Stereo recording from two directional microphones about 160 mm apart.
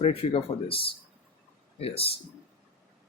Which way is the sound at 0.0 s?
40° left (ahead or behind).